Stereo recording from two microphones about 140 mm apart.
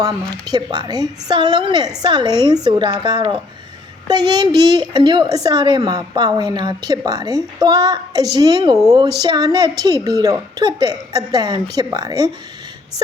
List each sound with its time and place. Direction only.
0.0 s a woman's voice: 30° right (ahead or behind)